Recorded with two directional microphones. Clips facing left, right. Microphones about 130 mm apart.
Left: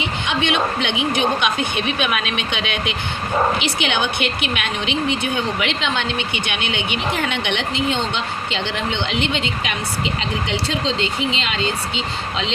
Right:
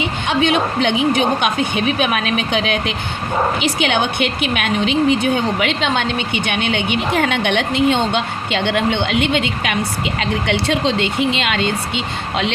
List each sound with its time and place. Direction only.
0.3 s speech: 45° right (ahead or behind); by 11.6 s 60° right (ahead or behind)